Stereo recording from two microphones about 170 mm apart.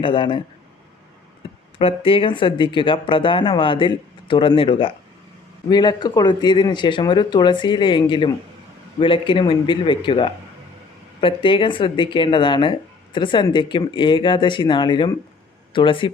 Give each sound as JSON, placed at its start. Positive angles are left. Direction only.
{"t": 0.0, "sound": "speech", "side_deg": 30}
{"t": 1.8, "sound": "speech", "side_deg": 35}